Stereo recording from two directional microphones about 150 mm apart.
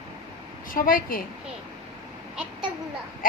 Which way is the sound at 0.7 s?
70° left (ahead or behind).